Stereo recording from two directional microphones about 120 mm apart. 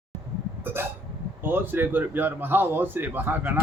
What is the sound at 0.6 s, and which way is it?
Hiccup, 20° right (ahead or behind).